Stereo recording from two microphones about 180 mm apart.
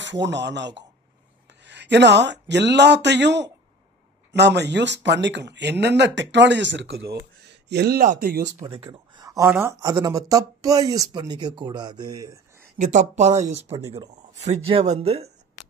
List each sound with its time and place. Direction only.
0.0 s speech: 80° right; by 8.4 s 55° right (ahead or behind)
8.6 s speech: 30° right (ahead or behind)
12.7 s speech: 40° right (ahead or behind)